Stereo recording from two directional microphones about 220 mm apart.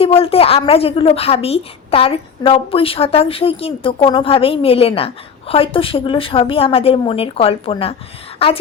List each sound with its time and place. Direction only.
0.0 s a woman's voice: 25° left (ahead or behind)